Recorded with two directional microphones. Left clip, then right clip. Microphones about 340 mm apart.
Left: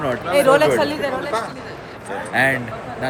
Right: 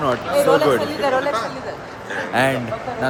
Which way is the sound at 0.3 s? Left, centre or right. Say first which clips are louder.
Left 2 dB; left.